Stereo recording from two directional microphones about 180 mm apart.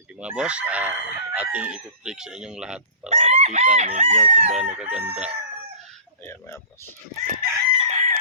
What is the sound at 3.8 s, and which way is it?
Speech, 40° right (ahead or behind).